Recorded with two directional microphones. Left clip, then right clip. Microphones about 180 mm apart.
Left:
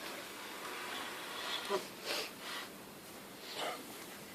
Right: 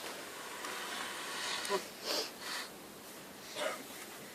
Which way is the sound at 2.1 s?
40° right (ahead or behind).